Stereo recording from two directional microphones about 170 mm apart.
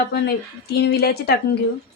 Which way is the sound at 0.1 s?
75° left (ahead or behind).